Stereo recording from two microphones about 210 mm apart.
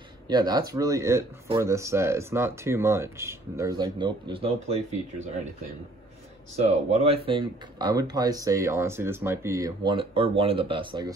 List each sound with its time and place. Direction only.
0.3 s speech: 20° right (ahead or behind)
6.5 s speech: 30° right (ahead or behind)